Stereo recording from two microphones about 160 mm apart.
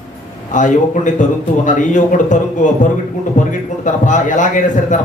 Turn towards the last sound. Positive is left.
turn(degrees=50)  # may be behind; listen again after turning